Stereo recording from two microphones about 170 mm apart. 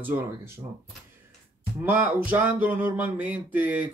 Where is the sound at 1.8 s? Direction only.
10° right (ahead or behind).